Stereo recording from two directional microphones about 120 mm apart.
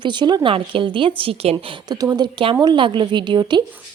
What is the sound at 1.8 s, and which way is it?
A woman's voice, 35° right (ahead or behind).